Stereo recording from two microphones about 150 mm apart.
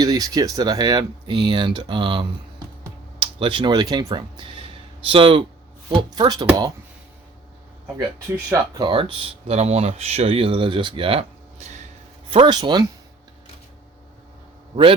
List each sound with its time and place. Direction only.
0.0 s speech: 25° right (ahead or behind)
8.8 s speech: 35° right (ahead or behind)
12.3 s speech: 30° right (ahead or behind)